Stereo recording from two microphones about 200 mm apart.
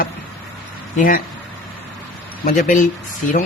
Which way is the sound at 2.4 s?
40° left (ahead or behind).